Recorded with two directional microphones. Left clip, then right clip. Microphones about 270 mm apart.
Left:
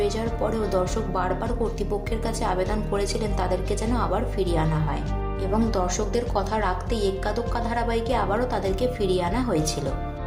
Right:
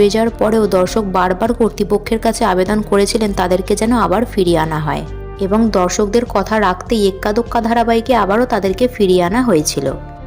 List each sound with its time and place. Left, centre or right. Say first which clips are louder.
0.0 s a woman's voice: right 13 dB; right